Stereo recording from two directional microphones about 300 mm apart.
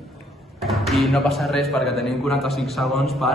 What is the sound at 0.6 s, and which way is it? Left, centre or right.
Speech, centre.